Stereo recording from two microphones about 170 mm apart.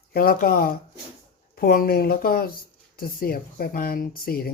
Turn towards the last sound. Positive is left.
turn(degrees=60)  # may be behind; listen again after turning